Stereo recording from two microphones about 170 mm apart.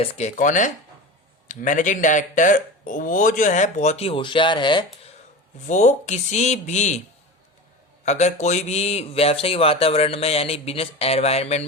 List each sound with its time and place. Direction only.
0.0 s a man's voice: 35° left (ahead or behind)
0.3 s speech: 50° left (ahead or behind); by 4.9 s 25° left (ahead or behind)
5.6 s speech: 45° left (ahead or behind)
8.0 s a man's voice: 40° left (ahead or behind)